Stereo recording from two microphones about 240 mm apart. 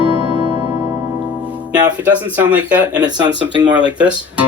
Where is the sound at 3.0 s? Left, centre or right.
Centre.